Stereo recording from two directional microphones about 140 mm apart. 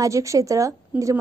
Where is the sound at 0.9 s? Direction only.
10° right (ahead or behind).